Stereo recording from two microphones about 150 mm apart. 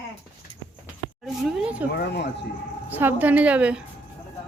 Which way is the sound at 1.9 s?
90° left.